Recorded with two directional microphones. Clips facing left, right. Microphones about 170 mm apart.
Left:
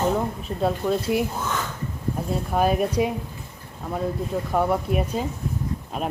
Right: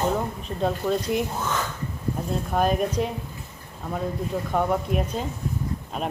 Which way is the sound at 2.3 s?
5° left (ahead or behind).